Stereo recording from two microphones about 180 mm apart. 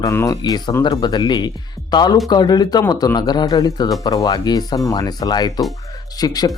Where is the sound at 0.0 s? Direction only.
15° left (ahead or behind).